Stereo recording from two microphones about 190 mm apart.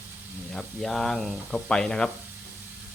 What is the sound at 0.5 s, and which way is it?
Speech, centre (ahead or behind).